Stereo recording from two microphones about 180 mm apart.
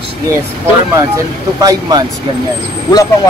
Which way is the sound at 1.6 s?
20° right (ahead or behind).